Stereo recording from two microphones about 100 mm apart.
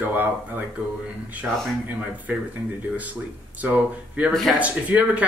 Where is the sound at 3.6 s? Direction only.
15° right (ahead or behind).